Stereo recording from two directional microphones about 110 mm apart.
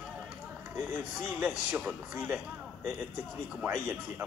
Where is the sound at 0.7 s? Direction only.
25° right (ahead or behind).